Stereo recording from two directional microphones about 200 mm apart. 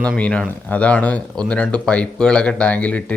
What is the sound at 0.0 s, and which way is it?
Speech, 5° left (ahead or behind).